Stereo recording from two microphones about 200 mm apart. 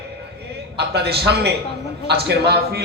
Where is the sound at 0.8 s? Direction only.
55° right (ahead or behind).